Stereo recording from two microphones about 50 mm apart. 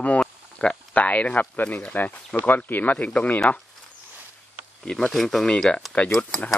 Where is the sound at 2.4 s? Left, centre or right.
Left.